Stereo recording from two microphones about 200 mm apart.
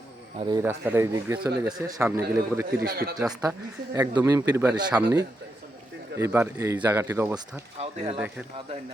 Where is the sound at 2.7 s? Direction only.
50° right (ahead or behind).